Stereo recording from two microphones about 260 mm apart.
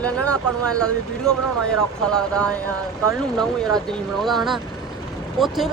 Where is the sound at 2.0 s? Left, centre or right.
Centre.